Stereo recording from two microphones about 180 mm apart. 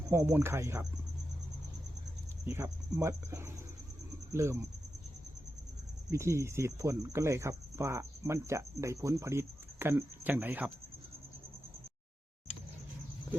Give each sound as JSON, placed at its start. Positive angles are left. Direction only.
{"t": 0.1, "sound": "speech", "side_deg": -15}
{"t": 2.5, "sound": "speech", "side_deg": -15}
{"t": 6.1, "sound": "speech", "side_deg": -15}